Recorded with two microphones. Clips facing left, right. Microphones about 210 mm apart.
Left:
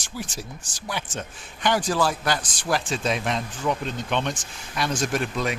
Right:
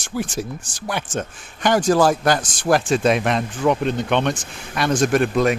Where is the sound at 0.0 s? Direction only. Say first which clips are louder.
Right 9 dB; 55° right (ahead or behind).